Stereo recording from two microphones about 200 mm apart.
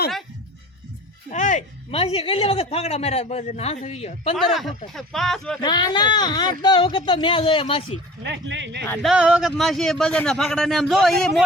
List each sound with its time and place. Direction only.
1.3 s speech: 40° left (ahead or behind)
4.4 s a man's voice: centre (ahead or behind)
5.6 s speech: 20° left (ahead or behind)
8.2 s speech: 60° right (ahead or behind)
8.9 s a man's voice: centre (ahead or behind)